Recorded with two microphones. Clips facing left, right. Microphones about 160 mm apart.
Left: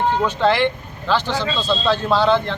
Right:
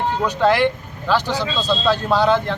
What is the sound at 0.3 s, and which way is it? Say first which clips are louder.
Speech: right 1 dB; 10° right (ahead or behind).